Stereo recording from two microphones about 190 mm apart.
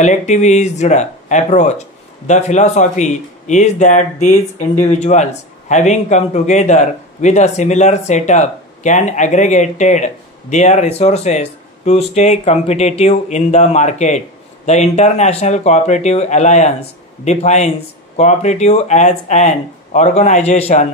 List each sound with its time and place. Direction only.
0.0 s speech: 40° left (ahead or behind)